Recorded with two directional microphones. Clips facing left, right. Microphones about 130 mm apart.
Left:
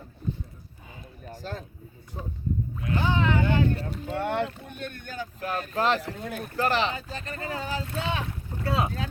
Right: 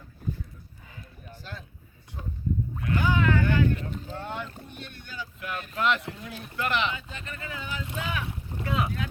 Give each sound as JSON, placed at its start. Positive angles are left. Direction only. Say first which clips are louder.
{"t": 1.2, "sound": "a sound", "louder": "left 7 dB", "side_deg": 40}
{"t": 2.9, "sound": "boat", "louder": "even", "side_deg": 25}
{"t": 4.0, "sound": "boat", "louder": "left 8 dB", "side_deg": 65}
{"t": 4.6, "sound": "speech", "louder": "left 6 dB", "side_deg": 50}
{"t": 6.1, "sound": "speech", "louder": "left 6 dB", "side_deg": 50}
{"t": 6.6, "sound": "speech", "louder": "left 3 dB", "side_deg": 35}